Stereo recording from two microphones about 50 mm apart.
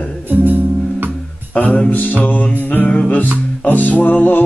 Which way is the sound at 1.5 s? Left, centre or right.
Left.